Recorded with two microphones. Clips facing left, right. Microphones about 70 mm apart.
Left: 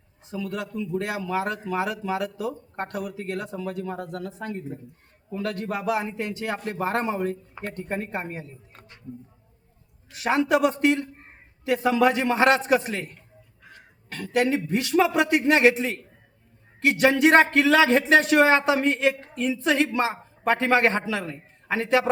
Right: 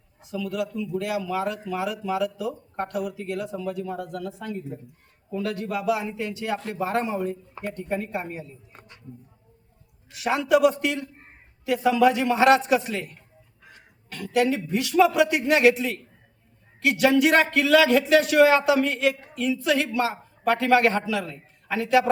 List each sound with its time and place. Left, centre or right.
0.2 s speech: left
10.1 s speech: left